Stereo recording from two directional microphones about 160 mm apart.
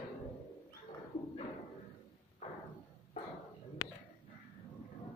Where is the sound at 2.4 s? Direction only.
40° left (ahead or behind).